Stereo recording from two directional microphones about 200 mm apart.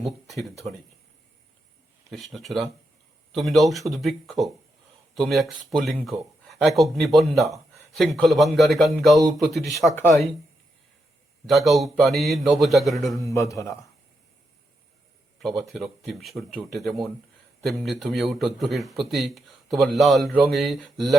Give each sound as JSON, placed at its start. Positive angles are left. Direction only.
{"t": 0.0, "sound": "speech", "side_deg": 0}
{"t": 2.1, "sound": "speech", "side_deg": 0}
{"t": 9.9, "sound": "a man's voice", "side_deg": 10}
{"t": 11.4, "sound": "speech", "side_deg": 0}
{"t": 13.2, "sound": "a man's voice", "side_deg": 15}
{"t": 15.4, "sound": "speech", "side_deg": 0}